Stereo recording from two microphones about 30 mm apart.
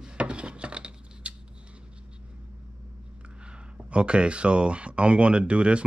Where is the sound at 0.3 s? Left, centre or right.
Right.